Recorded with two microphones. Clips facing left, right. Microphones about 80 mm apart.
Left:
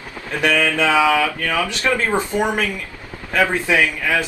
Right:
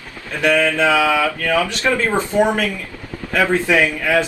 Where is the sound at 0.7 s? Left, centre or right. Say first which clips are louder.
Right 1 dB; left.